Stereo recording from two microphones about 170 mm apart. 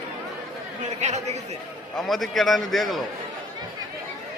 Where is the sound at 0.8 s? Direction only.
40° right (ahead or behind).